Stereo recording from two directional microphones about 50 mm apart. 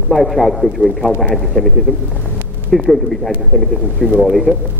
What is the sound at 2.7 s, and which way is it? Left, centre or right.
Speech, centre.